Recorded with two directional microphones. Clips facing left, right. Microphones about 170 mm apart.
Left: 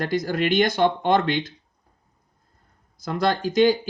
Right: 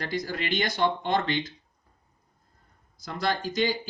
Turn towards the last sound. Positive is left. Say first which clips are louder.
# left 8 dB
turn(degrees=55)  # may be behind; listen again after turning